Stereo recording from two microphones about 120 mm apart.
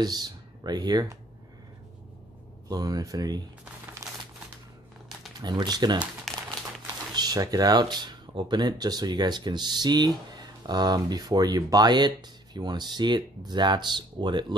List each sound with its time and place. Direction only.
0.0 s speech: 35° right (ahead or behind)
2.7 s speech: 30° right (ahead or behind)
4.0 s crumpling: 30° right (ahead or behind)
5.4 s speech: 35° right (ahead or behind)
6.3 s crumpling: 5° left (ahead or behind)
7.2 s speech: 35° right (ahead or behind)